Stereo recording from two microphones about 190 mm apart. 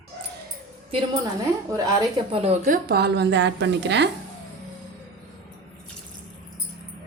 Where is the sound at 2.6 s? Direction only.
50° right (ahead or behind); by 4.1 s 65° right (ahead or behind).